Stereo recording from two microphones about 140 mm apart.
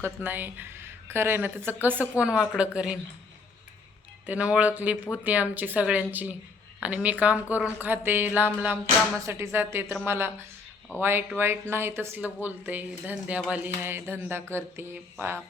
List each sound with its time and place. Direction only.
0.0 s speech: 15° right (ahead or behind)
4.3 s speech: 10° right (ahead or behind)